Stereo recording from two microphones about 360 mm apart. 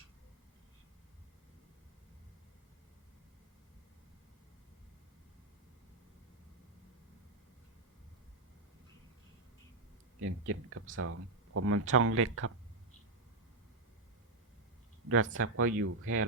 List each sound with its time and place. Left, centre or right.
10.2 s speech: right
15.1 s speech: right